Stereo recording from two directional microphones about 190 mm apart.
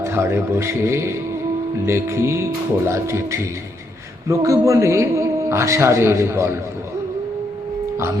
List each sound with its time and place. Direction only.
0.0 s a man's voice: 15° right (ahead or behind)